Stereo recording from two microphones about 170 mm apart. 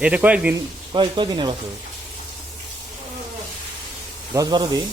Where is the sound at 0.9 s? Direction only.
25° right (ahead or behind).